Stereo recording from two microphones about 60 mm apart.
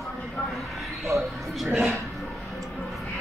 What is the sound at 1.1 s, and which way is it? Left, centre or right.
Speech, right.